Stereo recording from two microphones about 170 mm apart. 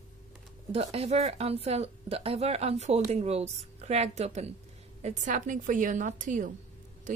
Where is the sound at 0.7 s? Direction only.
35° right (ahead or behind).